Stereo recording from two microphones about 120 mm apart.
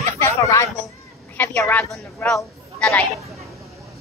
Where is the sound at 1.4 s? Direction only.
15° left (ahead or behind).